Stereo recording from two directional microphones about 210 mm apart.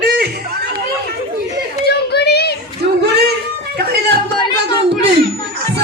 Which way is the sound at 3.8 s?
50° right (ahead or behind).